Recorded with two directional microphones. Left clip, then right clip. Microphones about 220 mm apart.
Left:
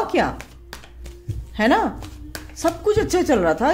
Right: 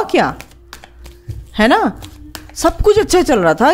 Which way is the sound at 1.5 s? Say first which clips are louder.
Right 6 dB; 35° right (ahead or behind).